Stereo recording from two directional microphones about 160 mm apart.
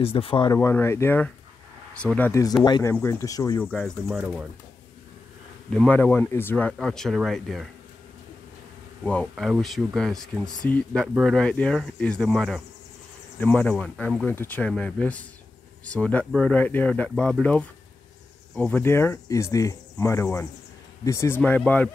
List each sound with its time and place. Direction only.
0.0 s speech: 35° left (ahead or behind)
0.6 s speech: 15° left (ahead or behind)
3.6 s speech: 5° left (ahead or behind)
4.1 s speech: 10° right (ahead or behind)
5.7 s speech: 5° left (ahead or behind)
9.0 s speech: 5° left (ahead or behind)